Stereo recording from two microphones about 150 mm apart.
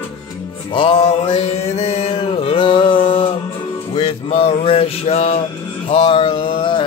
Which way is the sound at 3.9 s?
40° left (ahead or behind).